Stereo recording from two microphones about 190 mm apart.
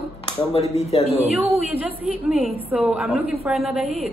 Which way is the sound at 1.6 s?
5° right (ahead or behind).